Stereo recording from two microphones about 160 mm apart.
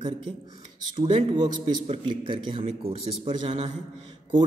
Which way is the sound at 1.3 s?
30° right (ahead or behind).